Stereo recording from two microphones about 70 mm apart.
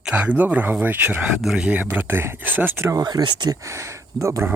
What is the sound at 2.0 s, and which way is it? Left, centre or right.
Speech, right.